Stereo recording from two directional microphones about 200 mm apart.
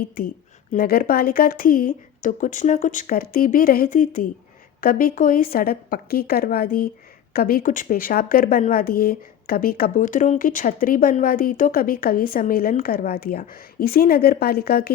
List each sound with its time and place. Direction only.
0.2 s speech: 45° left (ahead or behind)